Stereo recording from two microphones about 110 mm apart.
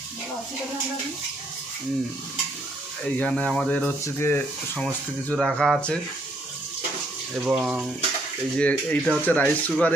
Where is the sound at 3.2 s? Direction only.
10° left (ahead or behind).